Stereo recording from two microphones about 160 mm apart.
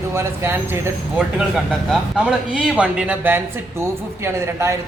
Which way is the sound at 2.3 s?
5° right (ahead or behind).